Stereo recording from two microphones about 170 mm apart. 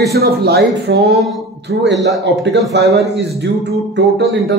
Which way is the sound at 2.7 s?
70° right (ahead or behind).